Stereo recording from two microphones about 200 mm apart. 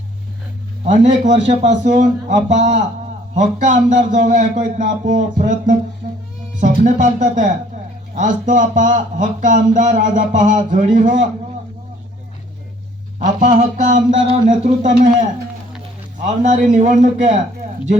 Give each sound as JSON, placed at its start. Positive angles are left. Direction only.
{"t": 0.9, "sound": "speech", "side_deg": -35}
{"t": 13.1, "sound": "speech", "side_deg": -35}
{"t": 16.2, "sound": "speech", "side_deg": -35}